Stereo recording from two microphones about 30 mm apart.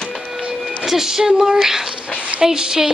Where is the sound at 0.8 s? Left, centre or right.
Centre.